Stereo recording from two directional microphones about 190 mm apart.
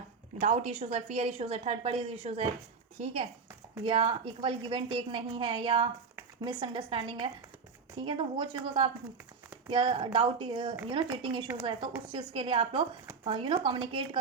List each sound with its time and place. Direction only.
0.3 s a woman's voice: 35° right (ahead or behind)